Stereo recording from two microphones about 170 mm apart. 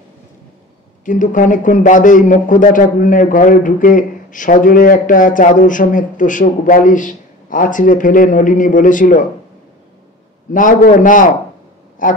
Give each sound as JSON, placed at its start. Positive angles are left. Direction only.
{"t": 1.0, "sound": "speech", "side_deg": 50}
{"t": 10.5, "sound": "speech", "side_deg": 50}